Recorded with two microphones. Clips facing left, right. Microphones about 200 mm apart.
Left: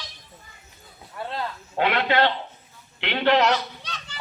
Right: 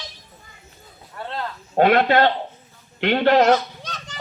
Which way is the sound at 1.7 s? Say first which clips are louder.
Right 6 dB; 45° right (ahead or behind).